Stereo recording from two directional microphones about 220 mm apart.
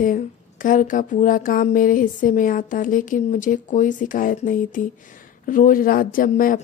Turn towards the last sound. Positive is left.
turn(degrees=40)  # may be behind; listen again after turning